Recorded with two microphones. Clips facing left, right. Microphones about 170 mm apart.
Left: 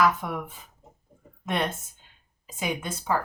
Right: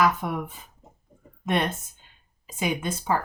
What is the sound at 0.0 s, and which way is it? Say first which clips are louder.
Speech: right 1 dB; 15° right (ahead or behind).